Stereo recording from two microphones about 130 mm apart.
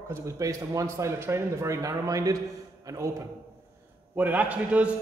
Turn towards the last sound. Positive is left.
turn(degrees=-10)  # may be behind; listen again after turning